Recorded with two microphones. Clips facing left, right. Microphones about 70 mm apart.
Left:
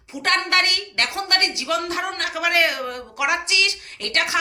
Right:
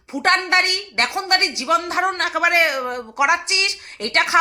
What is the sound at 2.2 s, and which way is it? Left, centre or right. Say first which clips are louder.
Speech: right 6 dB; right.